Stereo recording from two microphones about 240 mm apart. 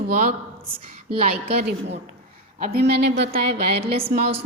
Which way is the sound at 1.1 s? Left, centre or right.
Right.